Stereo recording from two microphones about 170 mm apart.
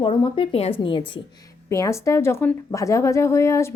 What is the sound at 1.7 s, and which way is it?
A woman's voice, 15° left (ahead or behind).